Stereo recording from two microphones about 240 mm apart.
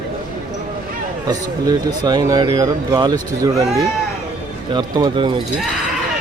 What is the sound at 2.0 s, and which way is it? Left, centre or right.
Speech, centre.